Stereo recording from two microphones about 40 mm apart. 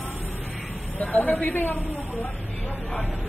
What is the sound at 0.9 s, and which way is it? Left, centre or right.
Speech, left.